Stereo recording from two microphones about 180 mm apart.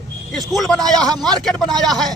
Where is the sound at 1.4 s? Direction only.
Centre (ahead or behind).